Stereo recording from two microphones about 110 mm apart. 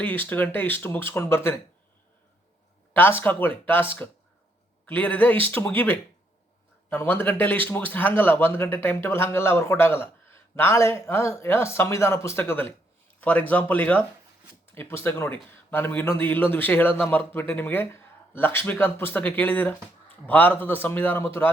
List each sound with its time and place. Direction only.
0.0 s speech: 15° left (ahead or behind)
2.9 s a man's voice: 20° left (ahead or behind)
4.9 s a man's voice: 15° left (ahead or behind)